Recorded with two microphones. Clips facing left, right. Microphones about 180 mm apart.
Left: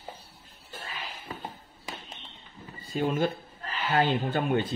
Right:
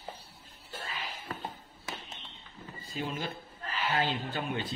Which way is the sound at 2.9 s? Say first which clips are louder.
Left 9 dB; 55° left (ahead or behind).